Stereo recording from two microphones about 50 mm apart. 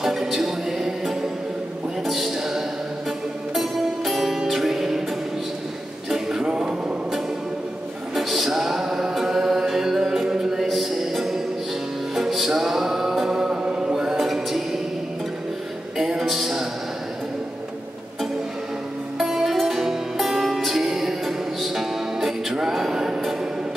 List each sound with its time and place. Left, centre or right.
0.0 s music: centre
2.0 s a sound: centre
3.5 s music: centre
6.0 s music: centre
8.1 s music: centre
16.0 s music: centre
19.1 s music: centre